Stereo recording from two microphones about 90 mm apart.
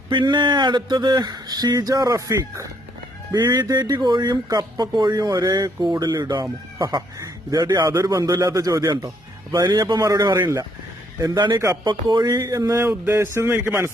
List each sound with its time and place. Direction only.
0.1 s speech: 60° right (ahead or behind); by 2.6 s 35° right (ahead or behind)
3.3 s speech: 55° right (ahead or behind)
7.9 s speech: 40° right (ahead or behind)
11.5 s speech: 35° right (ahead or behind)
12.1 s a man's voice: 50° right (ahead or behind); by 13.7 s 30° right (ahead or behind)